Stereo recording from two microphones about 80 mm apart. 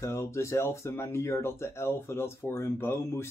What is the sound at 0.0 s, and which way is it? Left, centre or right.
Speech, left.